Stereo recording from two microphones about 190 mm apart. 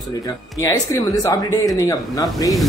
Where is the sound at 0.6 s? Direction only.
15° left (ahead or behind).